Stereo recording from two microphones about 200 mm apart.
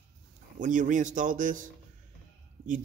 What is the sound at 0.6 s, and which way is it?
Speech, 40° right (ahead or behind).